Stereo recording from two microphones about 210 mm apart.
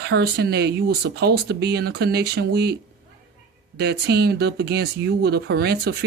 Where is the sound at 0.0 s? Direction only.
50° right (ahead or behind).